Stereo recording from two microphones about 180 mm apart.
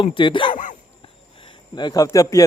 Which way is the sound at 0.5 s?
45° left (ahead or behind).